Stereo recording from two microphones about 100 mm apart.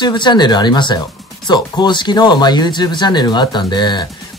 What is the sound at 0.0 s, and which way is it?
Speech, 50° left (ahead or behind).